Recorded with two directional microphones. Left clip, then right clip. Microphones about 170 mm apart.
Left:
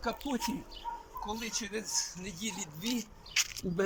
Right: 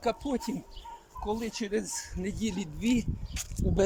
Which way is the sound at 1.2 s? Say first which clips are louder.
Right 5 dB; 30° right (ahead or behind).